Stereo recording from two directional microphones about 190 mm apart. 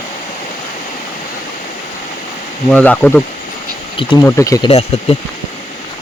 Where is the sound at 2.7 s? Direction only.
5° left (ahead or behind).